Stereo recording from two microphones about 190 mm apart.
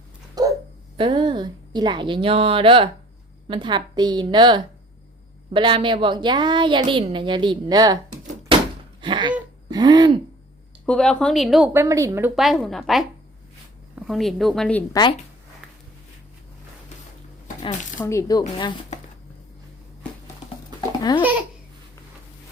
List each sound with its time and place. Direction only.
0.4 s dog: 20° right (ahead or behind)
0.9 s a woman's voice: 25° right (ahead or behind)
9.0 s a sound: 25° right (ahead or behind)
9.6 s a woman's voice: 20° right (ahead or behind)
10.8 s a woman's voice: 5° left (ahead or behind)
11.7 s a woman's voice: 15° right (ahead or behind)
12.4 s a woman's voice: centre (ahead or behind)
18.0 s speech: 15° left (ahead or behind)
21.2 s babbling: 10° right (ahead or behind)